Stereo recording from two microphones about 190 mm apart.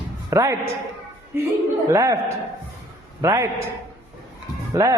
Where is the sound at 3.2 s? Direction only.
15° right (ahead or behind).